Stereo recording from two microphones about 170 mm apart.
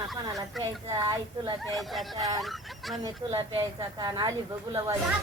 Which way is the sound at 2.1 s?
20° right (ahead or behind).